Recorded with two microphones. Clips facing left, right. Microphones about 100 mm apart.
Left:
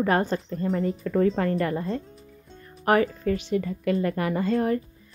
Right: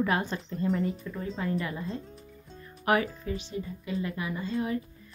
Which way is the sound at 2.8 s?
40° left (ahead or behind).